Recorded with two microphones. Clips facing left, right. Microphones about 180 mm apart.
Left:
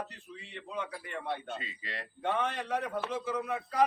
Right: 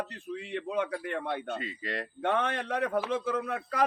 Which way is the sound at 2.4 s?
70° right (ahead or behind).